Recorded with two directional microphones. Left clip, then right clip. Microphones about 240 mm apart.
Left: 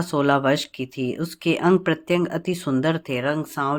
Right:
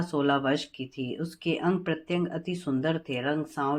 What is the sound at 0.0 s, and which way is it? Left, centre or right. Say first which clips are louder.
Speech: left 6 dB; left.